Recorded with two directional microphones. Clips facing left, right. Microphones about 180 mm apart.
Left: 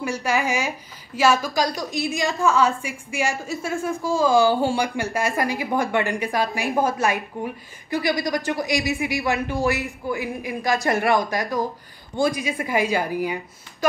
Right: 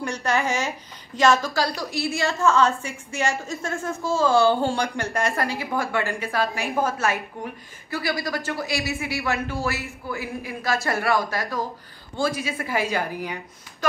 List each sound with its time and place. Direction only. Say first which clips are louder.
0.0 s a woman's voice: left 1 dB; 10° left (ahead or behind)